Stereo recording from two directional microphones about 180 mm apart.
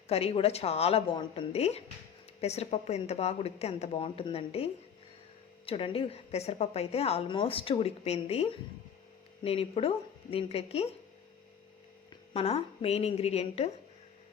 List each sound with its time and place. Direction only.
0.1 s a woman's voice: 35° left (ahead or behind)
12.3 s a woman's voice: 35° left (ahead or behind)